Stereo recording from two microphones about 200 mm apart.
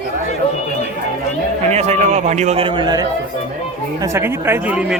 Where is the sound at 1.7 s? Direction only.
35° right (ahead or behind); by 5.0 s 5° right (ahead or behind).